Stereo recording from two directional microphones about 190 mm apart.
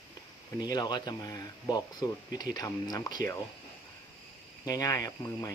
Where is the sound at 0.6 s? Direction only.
20° left (ahead or behind).